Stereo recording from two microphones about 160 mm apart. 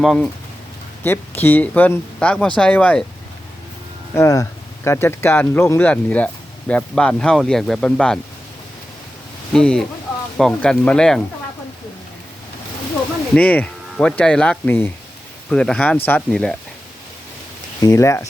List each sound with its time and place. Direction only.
0.0 s speech: centre (ahead or behind)
1.0 s speech: 15° left (ahead or behind)
4.1 s speech: 20° left (ahead or behind); by 8.2 s 5° left (ahead or behind)
9.5 s speech: 5° left (ahead or behind)
13.3 s speech: 10° left (ahead or behind)
17.7 s speech: 20° left (ahead or behind)